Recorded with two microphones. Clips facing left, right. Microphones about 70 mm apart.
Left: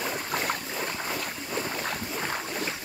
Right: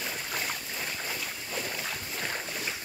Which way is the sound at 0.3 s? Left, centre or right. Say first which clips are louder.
Left 5 dB; left.